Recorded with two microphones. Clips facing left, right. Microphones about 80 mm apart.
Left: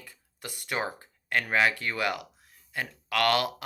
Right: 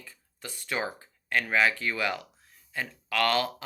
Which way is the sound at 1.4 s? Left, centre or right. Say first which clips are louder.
Even; left.